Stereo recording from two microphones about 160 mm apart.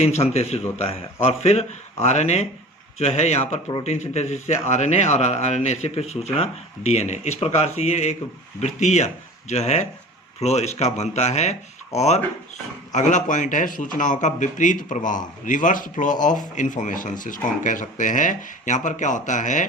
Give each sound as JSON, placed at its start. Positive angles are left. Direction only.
{"t": 0.0, "sound": "a man's voice", "side_deg": 40}